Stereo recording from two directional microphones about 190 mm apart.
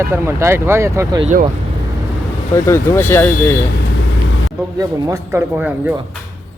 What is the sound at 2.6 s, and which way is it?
Speech, 15° left (ahead or behind).